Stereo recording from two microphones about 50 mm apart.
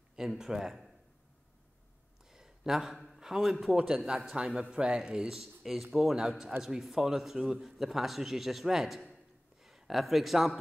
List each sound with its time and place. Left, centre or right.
0.3 s a man's voice: centre
2.2 s a man's voice: centre
3.7 s a man's voice: centre
5.3 s a man's voice: centre